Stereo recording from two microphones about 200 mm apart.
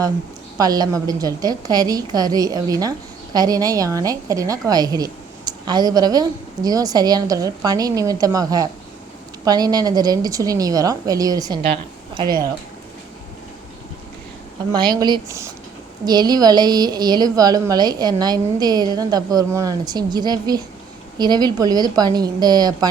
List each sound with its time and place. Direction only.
0.5 s a woman's voice: 20° right (ahead or behind)
14.7 s a woman's voice: 20° right (ahead or behind)